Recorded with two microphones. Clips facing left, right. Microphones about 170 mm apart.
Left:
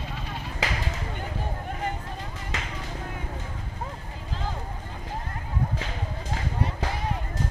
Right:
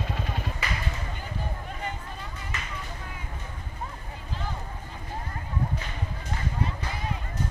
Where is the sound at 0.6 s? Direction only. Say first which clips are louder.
Left 6 dB; 90° left.